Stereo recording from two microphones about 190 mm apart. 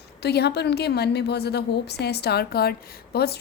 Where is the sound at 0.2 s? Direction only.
60° left (ahead or behind).